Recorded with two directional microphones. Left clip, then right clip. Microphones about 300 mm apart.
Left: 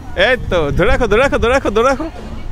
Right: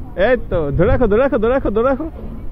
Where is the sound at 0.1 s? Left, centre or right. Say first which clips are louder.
Left 2 dB; centre.